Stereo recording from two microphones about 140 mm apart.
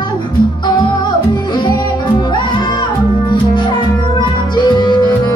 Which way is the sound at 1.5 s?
30° left (ahead or behind).